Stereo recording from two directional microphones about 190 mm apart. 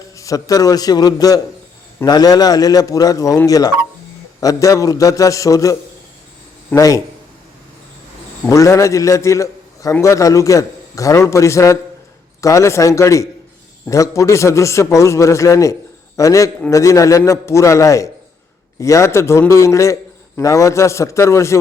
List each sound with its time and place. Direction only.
0.2 s a man's voice: 20° left (ahead or behind)
8.4 s a man's voice: 15° left (ahead or behind)